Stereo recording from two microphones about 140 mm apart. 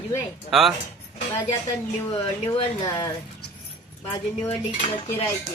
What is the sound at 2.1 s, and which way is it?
Speech, 40° left (ahead or behind).